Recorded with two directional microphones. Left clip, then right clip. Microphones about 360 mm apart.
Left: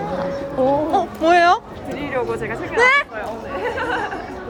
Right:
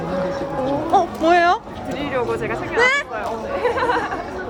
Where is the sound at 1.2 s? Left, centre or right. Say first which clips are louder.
Left 6 dB; centre.